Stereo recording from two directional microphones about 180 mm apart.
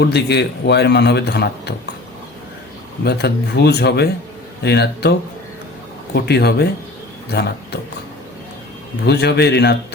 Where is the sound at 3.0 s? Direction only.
65° left (ahead or behind).